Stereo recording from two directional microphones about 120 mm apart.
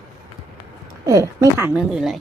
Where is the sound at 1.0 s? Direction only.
25° right (ahead or behind).